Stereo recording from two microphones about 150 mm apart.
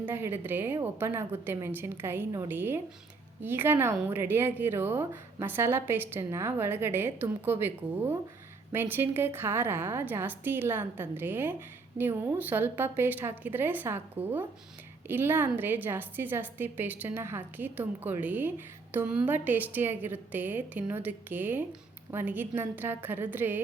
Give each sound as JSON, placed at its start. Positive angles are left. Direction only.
{"t": 0.0, "sound": "a woman's voice", "side_deg": -15}